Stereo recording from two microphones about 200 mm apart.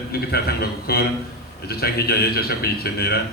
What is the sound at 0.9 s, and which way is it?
A man's voice, 50° left (ahead or behind).